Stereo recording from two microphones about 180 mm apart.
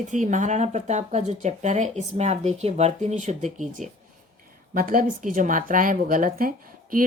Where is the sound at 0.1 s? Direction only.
45° right (ahead or behind).